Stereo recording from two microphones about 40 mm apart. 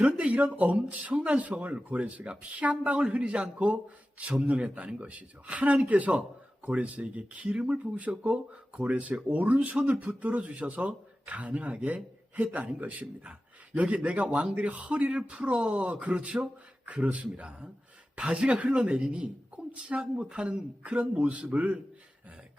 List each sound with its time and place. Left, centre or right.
0.0 s speech: right
16.1 s speech: right
16.8 s speech: right
18.2 s speech: right